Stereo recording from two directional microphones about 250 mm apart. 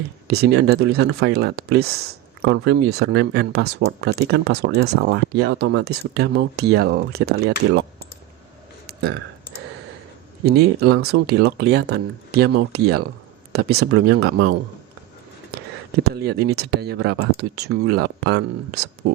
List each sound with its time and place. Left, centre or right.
0.3 s speech: right
8.9 s burping: right
10.4 s speech: right
16.0 s speech: right